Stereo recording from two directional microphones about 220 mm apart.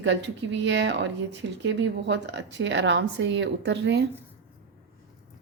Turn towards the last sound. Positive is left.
turn(degrees=-50)  # may be behind; listen again after turning